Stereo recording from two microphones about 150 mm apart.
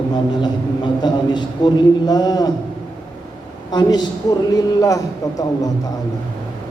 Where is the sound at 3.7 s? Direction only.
30° left (ahead or behind).